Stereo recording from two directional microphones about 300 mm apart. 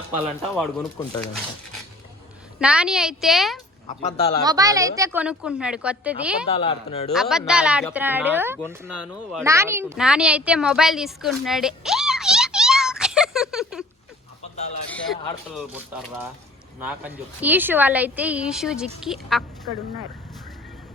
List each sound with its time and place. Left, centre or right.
0.4 s a woman's voice: centre
2.6 s a woman's voice: centre
4.4 s a woman's voice: centre
6.5 s speech: centre
7.1 s a woman's voice: centre
14.8 s a woman's voice: centre